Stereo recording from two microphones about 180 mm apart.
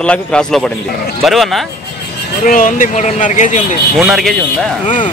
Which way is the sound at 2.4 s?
50° left (ahead or behind).